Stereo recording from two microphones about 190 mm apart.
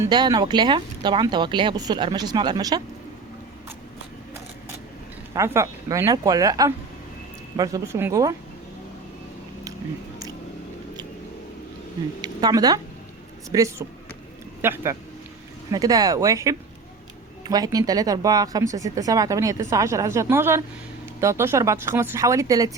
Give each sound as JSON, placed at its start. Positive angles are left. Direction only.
{"t": 0.0, "sound": "speech", "side_deg": -20}
{"t": 5.3, "sound": "speech", "side_deg": -15}
{"t": 12.2, "sound": "speech", "side_deg": -20}